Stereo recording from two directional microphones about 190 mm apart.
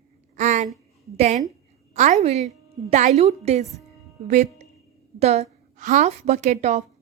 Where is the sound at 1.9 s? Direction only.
40° right (ahead or behind).